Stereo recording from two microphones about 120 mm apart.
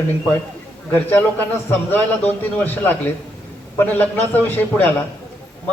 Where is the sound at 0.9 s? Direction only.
15° left (ahead or behind).